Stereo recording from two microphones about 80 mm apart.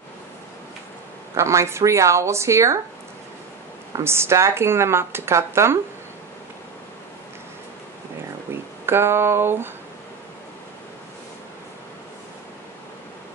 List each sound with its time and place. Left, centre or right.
1.3 s speech: right
4.0 s speech: right
8.8 s speech: right